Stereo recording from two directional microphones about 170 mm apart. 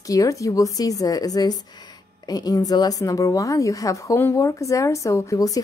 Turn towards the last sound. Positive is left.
turn(degrees=20)  # may be behind; listen again after turning